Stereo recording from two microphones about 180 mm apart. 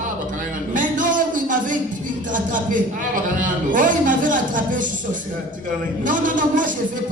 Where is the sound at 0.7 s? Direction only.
45° right (ahead or behind).